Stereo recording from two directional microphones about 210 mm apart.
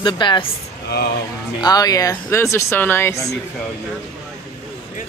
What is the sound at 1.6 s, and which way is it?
Speech, 15° left (ahead or behind).